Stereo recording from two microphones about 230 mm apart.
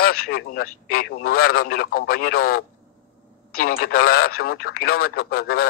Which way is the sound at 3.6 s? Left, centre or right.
Left.